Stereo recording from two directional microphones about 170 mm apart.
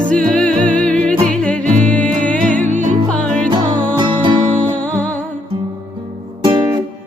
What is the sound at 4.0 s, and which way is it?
Music, 30° right (ahead or behind).